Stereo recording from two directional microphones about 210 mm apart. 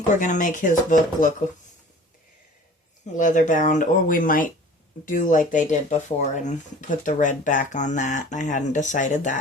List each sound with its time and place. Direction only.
0.1 s speech: 35° left (ahead or behind)
3.2 s speech: 35° left (ahead or behind)